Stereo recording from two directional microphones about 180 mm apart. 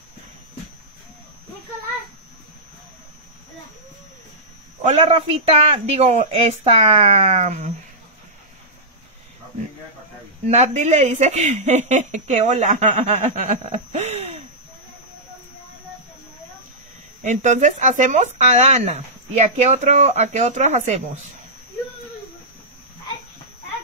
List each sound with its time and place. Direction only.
4.8 s speech: 35° right (ahead or behind)
10.5 s speech: 40° right (ahead or behind)
17.2 s speech: 40° right (ahead or behind)